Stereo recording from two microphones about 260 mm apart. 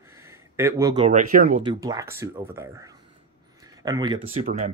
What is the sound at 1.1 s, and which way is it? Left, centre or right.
Speech, right.